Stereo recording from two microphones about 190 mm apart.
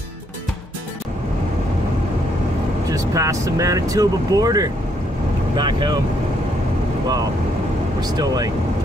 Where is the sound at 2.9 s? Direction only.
15° right (ahead or behind).